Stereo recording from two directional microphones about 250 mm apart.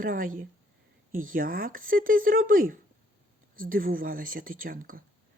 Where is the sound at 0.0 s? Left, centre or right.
Right.